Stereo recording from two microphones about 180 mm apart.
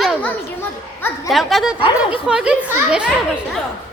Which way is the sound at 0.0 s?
5° left (ahead or behind).